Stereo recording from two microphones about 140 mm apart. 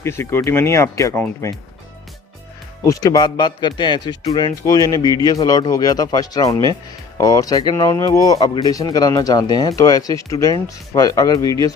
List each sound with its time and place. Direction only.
0.0 s speech: 20° left (ahead or behind)
2.8 s speech: 25° left (ahead or behind)